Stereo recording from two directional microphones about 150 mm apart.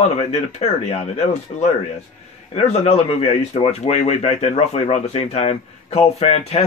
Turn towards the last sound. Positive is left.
turn(degrees=45)  # may be behind; listen again after turning